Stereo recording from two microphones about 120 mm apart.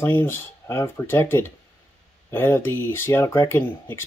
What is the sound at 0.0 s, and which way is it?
Speech, 20° left (ahead or behind).